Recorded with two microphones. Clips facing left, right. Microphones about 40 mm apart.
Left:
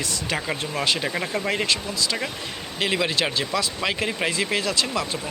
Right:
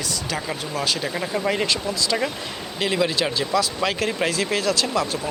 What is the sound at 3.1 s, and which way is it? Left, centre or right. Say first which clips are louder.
Speech: right 2 dB; left.